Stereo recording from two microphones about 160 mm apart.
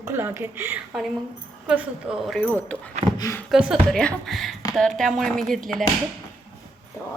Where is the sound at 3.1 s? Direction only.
20° left (ahead or behind).